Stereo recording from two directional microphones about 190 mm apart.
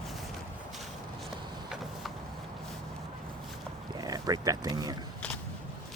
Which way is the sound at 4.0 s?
20° right (ahead or behind).